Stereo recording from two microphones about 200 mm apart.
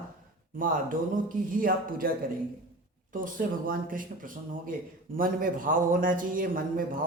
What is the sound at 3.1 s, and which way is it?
A man's voice, 45° right (ahead or behind).